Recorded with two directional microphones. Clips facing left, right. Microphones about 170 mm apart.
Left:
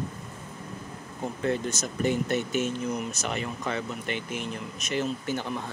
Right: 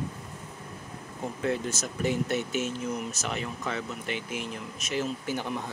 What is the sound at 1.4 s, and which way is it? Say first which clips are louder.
Speech: left 1 dB; 5° right (ahead or behind).